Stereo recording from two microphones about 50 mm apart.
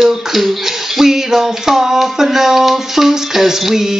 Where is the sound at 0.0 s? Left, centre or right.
Centre.